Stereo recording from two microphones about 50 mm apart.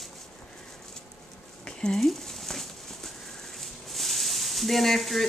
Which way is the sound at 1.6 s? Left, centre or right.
Centre.